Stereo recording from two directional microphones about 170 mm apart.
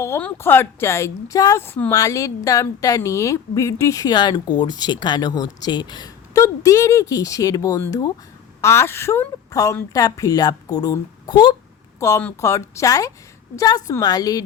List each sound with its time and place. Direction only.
0.0 s a woman's voice: 10° left (ahead or behind)